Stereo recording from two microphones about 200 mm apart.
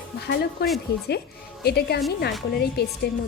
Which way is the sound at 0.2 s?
55° left (ahead or behind).